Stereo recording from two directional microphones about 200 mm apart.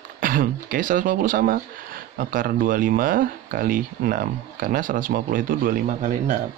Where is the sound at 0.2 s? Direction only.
45° right (ahead or behind).